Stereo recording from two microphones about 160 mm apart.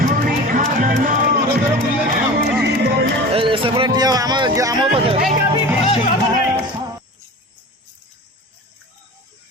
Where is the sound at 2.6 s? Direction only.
90° right.